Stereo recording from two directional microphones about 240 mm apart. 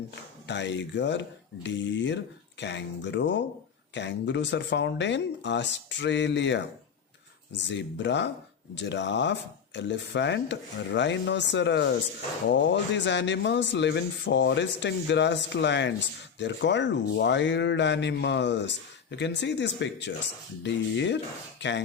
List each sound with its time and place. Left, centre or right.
0.4 s speech: left
7.7 s speech: left